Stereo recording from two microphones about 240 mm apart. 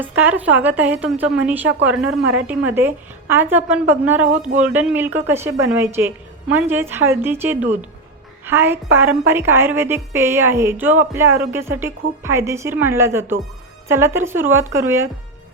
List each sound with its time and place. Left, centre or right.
0.0 s a woman's voice: centre
4.3 s speech: right
4.6 s a woman's voice: centre